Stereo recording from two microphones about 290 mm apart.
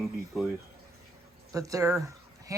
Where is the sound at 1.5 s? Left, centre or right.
Centre.